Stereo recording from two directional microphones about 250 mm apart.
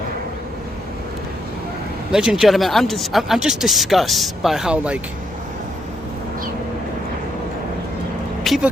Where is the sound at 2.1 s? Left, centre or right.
Centre.